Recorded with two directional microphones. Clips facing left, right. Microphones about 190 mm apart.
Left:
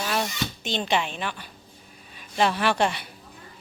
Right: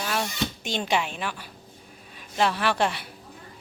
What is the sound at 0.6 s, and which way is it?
Speech, 10° right (ahead or behind).